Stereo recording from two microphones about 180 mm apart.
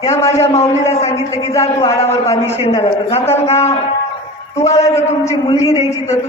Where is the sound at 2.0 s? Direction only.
35° left (ahead or behind).